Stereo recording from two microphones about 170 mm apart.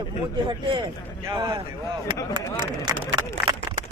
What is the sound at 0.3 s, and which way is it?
Speech, 30° right (ahead or behind).